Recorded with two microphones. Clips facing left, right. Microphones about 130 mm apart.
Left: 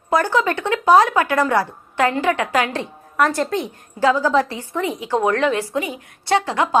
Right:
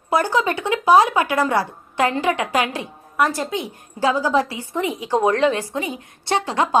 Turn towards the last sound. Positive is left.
turn(degrees=-25)  # may be behind; listen again after turning